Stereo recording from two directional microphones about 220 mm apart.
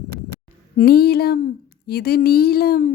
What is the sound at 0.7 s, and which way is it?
A child's voice, 45° left (ahead or behind).